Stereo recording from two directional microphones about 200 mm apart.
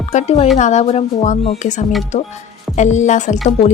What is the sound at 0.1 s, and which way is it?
Speech, 35° left (ahead or behind).